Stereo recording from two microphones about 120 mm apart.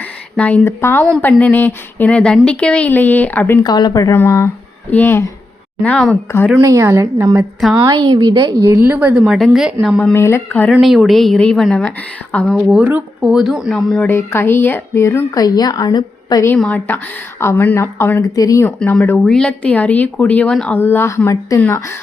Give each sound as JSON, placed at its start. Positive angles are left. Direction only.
{"t": 0.3, "sound": "a woman's voice", "side_deg": 10}
{"t": 3.6, "sound": "speech", "side_deg": 35}
{"t": 4.1, "sound": "a woman's voice", "side_deg": 20}
{"t": 6.5, "sound": "a woman's voice", "side_deg": -25}
{"t": 8.8, "sound": "a woman's voice", "side_deg": -15}
{"t": 10.2, "sound": "a woman's voice", "side_deg": 20}
{"t": 10.7, "sound": "a woman's voice", "side_deg": 0}
{"t": 12.8, "sound": "speech", "side_deg": -15}
{"t": 13.3, "sound": "a woman's voice", "side_deg": -5}
{"t": 14.1, "sound": "a woman's voice", "side_deg": 20}
{"t": 16.6, "sound": "a woman's voice", "side_deg": 10}
{"t": 17.4, "sound": "a woman's voice", "side_deg": 20}
{"t": 19.2, "sound": "a woman's voice", "side_deg": 5}